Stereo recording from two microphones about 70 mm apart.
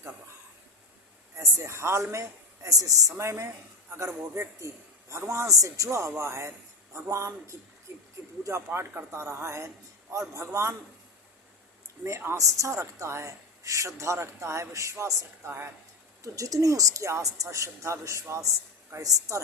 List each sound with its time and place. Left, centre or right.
1.4 s a woman's voice: right
3.2 s a woman's voice: right
7.9 s a sound: right
8.4 s a man's voice: right
12.0 s a woman's voice: right
16.2 s a woman's voice: right
19.0 s a woman's voice: right